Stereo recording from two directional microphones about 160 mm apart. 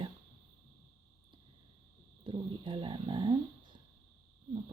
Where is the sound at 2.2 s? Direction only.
30° right (ahead or behind).